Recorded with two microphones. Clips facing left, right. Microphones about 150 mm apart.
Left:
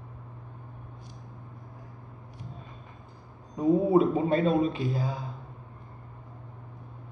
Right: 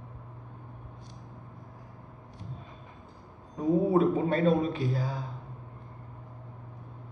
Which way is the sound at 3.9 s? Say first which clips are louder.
Left 2 dB; 15° left (ahead or behind).